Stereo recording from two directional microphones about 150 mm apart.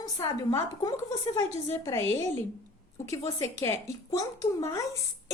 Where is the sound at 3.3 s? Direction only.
20° left (ahead or behind).